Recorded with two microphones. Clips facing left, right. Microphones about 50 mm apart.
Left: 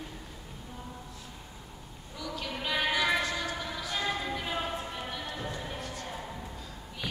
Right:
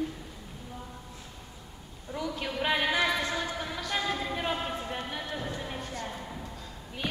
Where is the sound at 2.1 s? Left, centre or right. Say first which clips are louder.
Right 4 dB; right.